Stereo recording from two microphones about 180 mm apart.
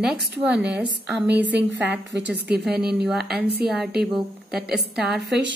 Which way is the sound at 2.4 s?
65° right (ahead or behind).